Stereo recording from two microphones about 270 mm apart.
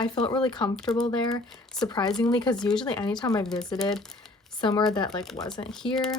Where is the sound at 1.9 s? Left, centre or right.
Centre.